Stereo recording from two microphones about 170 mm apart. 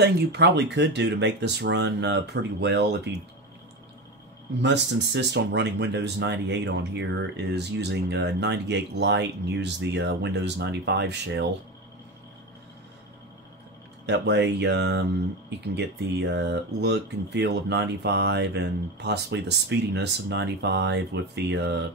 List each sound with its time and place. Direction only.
0.0 s speech: 80° right
4.6 s speech: 90° right
14.0 s speech: 90° right